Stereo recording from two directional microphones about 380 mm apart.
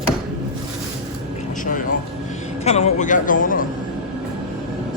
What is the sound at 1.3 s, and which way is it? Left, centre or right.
A man's voice, left.